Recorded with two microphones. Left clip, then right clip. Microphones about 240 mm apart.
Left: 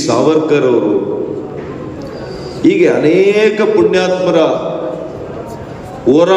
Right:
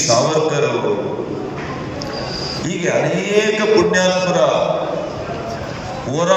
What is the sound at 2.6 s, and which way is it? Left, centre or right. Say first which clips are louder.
A man's voice: left 9 dB; left.